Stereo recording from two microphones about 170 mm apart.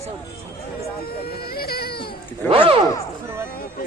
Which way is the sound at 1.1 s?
65° left (ahead or behind).